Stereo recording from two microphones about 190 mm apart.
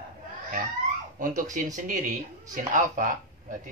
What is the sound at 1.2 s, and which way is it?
Speech, 45° right (ahead or behind).